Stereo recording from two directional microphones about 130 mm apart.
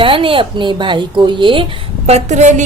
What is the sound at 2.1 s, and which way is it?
Speech, 65° right (ahead or behind).